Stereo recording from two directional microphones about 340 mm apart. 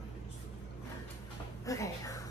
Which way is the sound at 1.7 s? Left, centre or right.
Centre.